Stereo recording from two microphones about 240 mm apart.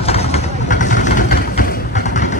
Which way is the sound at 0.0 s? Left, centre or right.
Left.